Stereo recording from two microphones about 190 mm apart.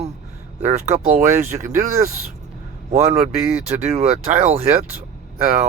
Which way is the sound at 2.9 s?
35° right (ahead or behind).